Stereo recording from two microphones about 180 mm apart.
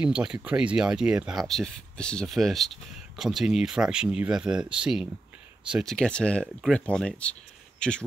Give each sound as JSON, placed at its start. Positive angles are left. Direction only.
{"t": 0.0, "sound": "speech", "side_deg": -5}